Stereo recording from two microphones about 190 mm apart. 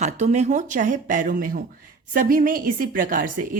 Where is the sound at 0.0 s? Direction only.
35° right (ahead or behind).